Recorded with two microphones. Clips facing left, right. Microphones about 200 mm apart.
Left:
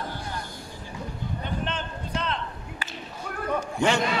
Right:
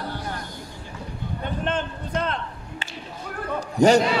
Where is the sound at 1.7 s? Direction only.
50° right (ahead or behind).